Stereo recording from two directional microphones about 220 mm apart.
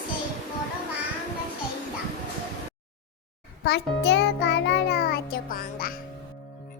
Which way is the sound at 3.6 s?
50° left (ahead or behind).